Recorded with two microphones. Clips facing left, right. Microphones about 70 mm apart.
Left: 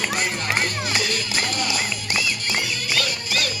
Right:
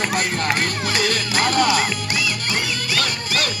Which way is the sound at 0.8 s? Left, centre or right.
Right.